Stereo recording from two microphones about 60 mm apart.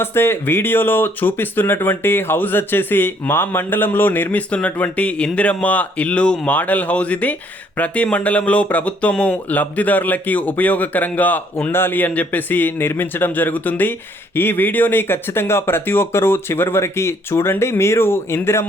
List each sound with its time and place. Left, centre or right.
0.0 s a man's voice: left
11.7 s speech: left